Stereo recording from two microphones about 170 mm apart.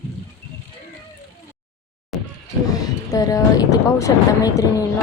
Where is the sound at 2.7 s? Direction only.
20° left (ahead or behind).